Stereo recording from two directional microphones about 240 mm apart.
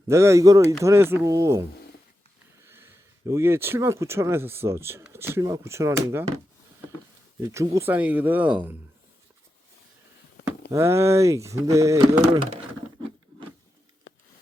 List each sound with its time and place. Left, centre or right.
0.1 s speech: centre
7.4 s speech: centre
10.7 s speech: centre
14.1 s a sound: left